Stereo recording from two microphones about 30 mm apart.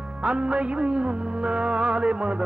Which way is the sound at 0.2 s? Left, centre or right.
Right.